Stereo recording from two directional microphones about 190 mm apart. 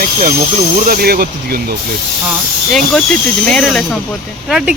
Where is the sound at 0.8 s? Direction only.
50° right (ahead or behind).